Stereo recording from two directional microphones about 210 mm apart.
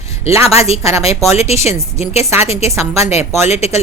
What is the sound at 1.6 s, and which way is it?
Speech, 30° left (ahead or behind).